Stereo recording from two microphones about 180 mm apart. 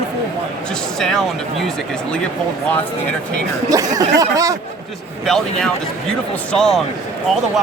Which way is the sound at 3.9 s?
20° right (ahead or behind).